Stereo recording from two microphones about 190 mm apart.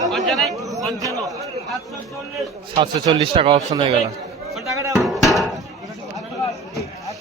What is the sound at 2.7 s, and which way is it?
A man's voice, 25° right (ahead or behind).